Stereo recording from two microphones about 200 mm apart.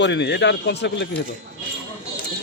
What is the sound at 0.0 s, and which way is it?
Speech, 60° left (ahead or behind).